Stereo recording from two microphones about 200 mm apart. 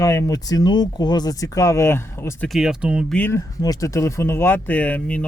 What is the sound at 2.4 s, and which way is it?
Speech, centre (ahead or behind).